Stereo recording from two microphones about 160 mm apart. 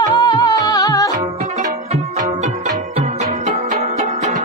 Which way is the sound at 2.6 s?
45° right (ahead or behind).